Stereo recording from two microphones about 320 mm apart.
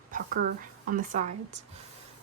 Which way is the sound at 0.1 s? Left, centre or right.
Right.